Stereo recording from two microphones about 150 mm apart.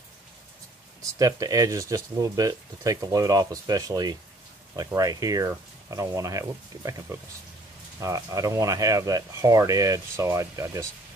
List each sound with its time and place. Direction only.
1.1 s speech: 20° right (ahead or behind)